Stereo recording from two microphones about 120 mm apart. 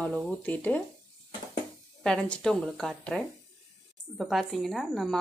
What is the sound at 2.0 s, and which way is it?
A woman's voice, 5° left (ahead or behind).